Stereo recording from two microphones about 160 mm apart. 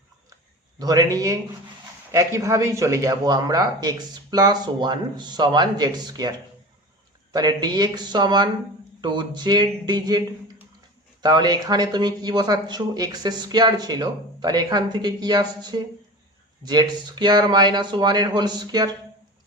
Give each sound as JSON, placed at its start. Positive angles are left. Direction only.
{"t": 0.8, "sound": "speech", "side_deg": -25}
{"t": 7.3, "sound": "speech", "side_deg": -25}